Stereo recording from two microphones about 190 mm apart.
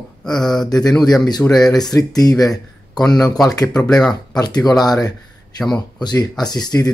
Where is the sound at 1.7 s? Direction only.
20° left (ahead or behind).